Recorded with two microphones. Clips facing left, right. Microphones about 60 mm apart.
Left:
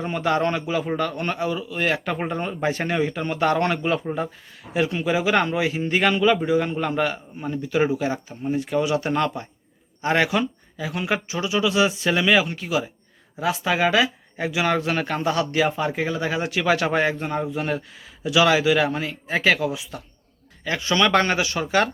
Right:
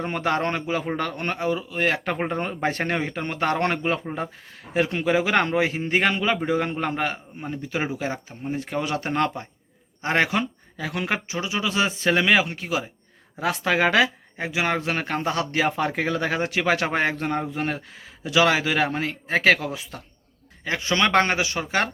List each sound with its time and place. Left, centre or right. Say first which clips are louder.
0.0 s speech: left 2 dB; right
10.8 s speech: even; right
11.1 s speech: left 6 dB; right
13.4 s speech: even; right
14.3 s speech: left 2 dB; right
15.7 s speech: even; right
16.4 s speech: left 1 dB; right
17.2 s speech: even; right
20.7 s speech: left 2 dB; right